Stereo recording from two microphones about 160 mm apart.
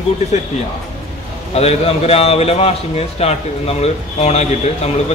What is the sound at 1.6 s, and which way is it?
A man's voice, 40° left (ahead or behind).